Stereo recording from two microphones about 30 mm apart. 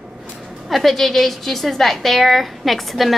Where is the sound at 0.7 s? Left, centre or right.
Centre.